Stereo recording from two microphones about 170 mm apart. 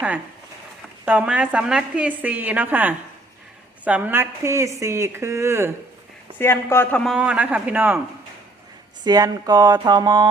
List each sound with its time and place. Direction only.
1.0 s a woman's voice: 5° right (ahead or behind)
6.4 s speech: 15° left (ahead or behind)
7.0 s a woman's voice: 5° right (ahead or behind)
9.0 s speech: 25° right (ahead or behind)